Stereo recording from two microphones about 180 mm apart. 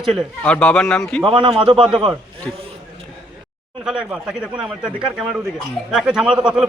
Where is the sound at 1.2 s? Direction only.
30° right (ahead or behind).